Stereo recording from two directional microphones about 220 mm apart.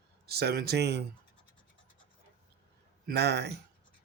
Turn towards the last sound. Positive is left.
turn(degrees=-50)  # may be behind; listen again after turning